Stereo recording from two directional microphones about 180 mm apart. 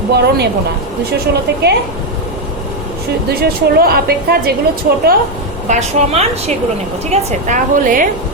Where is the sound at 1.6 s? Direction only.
65° right (ahead or behind).